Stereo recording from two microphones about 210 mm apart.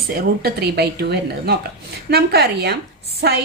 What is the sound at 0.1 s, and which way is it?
A woman's voice, 45° right (ahead or behind).